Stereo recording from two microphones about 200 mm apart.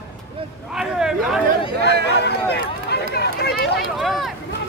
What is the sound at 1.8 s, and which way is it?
Speech, 60° left (ahead or behind).